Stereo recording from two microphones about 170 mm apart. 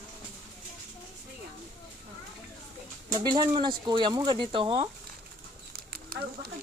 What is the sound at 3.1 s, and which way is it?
Speech, 25° right (ahead or behind).